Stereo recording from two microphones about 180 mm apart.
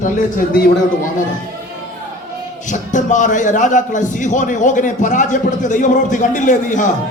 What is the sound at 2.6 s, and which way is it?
Speech, 45° left (ahead or behind).